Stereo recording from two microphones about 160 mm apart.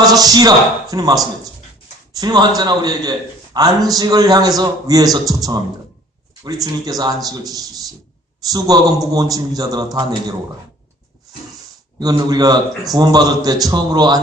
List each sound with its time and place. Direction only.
0.0 s a man's voice: 25° right (ahead or behind)
11.9 s a man's voice: 25° right (ahead or behind)